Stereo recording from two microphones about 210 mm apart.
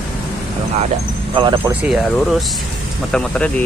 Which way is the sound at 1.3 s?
25° right (ahead or behind).